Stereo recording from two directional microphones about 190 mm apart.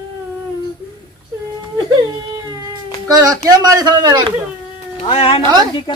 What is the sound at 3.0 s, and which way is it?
Speech, 20° right (ahead or behind).